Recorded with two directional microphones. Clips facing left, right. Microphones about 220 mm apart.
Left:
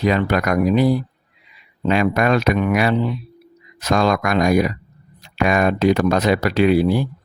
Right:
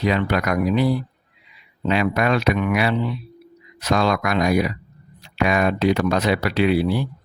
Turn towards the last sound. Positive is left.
turn(degrees=45)  # may be behind; listen again after turning